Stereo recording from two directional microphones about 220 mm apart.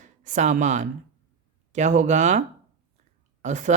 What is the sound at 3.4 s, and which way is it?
Speech, 35° right (ahead or behind).